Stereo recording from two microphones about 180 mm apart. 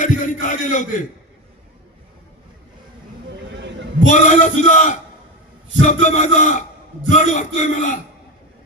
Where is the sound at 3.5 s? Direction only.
80° right.